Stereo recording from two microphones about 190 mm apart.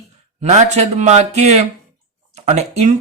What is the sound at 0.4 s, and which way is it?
Speech, 35° right (ahead or behind).